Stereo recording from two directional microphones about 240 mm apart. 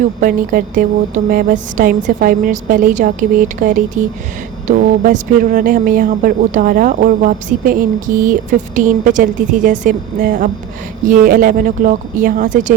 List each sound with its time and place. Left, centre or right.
0.2 s speech: right